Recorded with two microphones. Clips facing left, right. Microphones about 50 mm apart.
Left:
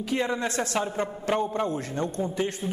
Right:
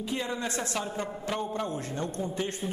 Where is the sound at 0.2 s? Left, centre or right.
Left.